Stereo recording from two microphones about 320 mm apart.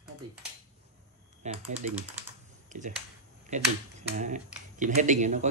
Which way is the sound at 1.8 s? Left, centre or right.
Right.